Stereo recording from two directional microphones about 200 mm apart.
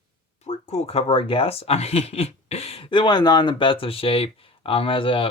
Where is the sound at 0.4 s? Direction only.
35° left (ahead or behind).